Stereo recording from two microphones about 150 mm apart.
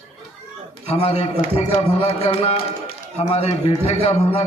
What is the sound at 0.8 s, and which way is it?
A man's voice, 45° left (ahead or behind).